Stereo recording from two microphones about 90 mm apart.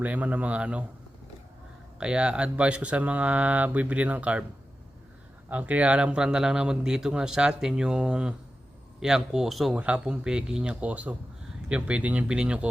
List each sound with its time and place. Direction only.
0.0 s speech: 15° right (ahead or behind)
2.0 s speech: 10° right (ahead or behind)
5.5 s speech: 15° right (ahead or behind)
9.7 s speech: 15° right (ahead or behind)